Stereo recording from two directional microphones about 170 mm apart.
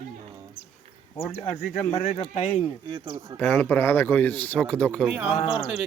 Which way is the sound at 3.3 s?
10° left (ahead or behind).